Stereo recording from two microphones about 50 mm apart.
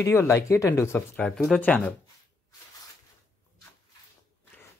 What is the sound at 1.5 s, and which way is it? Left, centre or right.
Speech, left.